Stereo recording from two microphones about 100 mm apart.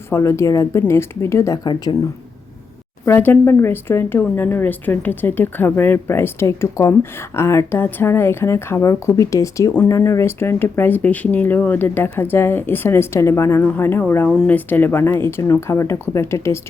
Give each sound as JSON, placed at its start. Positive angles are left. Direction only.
{"t": 0.1, "sound": "speech", "side_deg": 30}
{"t": 1.6, "sound": "speech", "side_deg": 50}
{"t": 3.1, "sound": "a woman's voice", "side_deg": 20}